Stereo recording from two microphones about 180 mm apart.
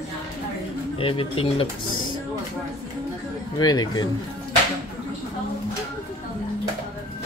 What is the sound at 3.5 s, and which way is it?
Speech, 20° left (ahead or behind).